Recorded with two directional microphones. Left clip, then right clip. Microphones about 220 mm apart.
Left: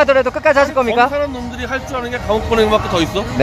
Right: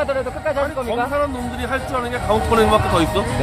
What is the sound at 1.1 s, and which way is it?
Speech, 10° left (ahead or behind).